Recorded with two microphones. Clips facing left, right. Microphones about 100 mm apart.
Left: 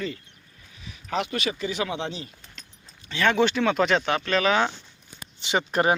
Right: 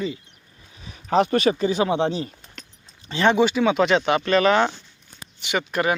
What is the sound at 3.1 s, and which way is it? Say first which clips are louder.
Speech: right 4 dB; 25° right (ahead or behind).